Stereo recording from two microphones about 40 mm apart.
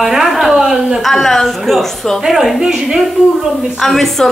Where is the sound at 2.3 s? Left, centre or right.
Centre.